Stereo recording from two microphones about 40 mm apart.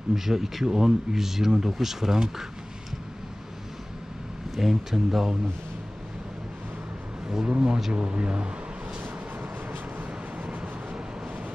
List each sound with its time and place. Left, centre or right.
0.1 s speech: centre
4.6 s speech: centre
7.4 s speech: right
9.7 s vehicle: right